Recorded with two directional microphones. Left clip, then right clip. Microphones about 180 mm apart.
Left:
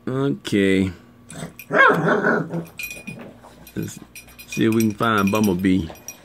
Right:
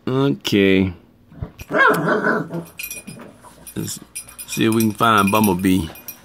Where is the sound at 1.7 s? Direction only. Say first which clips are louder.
Even; 25° left (ahead or behind).